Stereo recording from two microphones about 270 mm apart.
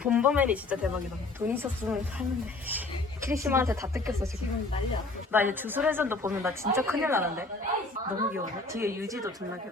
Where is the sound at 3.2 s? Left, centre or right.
Centre.